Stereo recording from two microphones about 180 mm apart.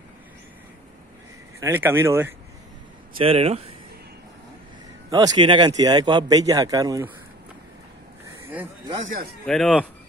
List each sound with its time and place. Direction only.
1.6 s speech: 10° right (ahead or behind)
3.2 s speech: 35° right (ahead or behind)
5.1 s a man's voice: 25° right (ahead or behind)
9.0 s speech: 50° right (ahead or behind)
9.5 s speech: centre (ahead or behind)